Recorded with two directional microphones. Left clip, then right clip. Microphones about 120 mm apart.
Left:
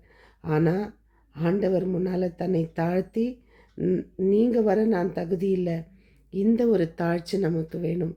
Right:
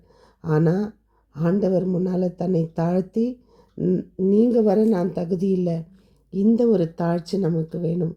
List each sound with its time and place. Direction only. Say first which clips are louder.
0.4 s a woman's voice: right 3 dB; 40° right (ahead or behind)
6.3 s a woman's voice: right 3 dB; 35° right (ahead or behind)